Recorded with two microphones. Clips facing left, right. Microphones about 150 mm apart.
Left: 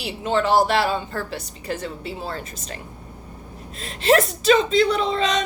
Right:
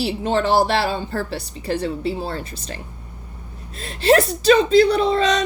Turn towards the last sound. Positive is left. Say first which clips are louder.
# right 4 dB
turn(degrees=-35)  # may be behind; listen again after turning